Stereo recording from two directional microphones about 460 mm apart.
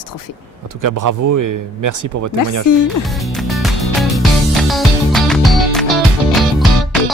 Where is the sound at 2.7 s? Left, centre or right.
Left.